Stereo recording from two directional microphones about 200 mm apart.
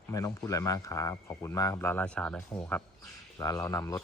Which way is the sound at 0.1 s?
15° left (ahead or behind).